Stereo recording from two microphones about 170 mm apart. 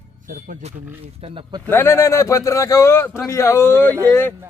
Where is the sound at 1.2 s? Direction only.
30° right (ahead or behind).